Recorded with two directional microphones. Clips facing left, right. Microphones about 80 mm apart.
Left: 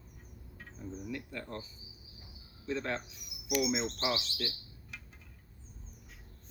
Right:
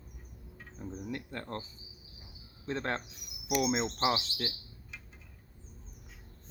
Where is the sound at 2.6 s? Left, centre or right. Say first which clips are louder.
Right 1 dB; right.